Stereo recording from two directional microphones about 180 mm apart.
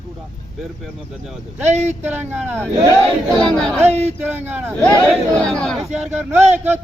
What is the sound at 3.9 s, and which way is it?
Speech, 40° right (ahead or behind).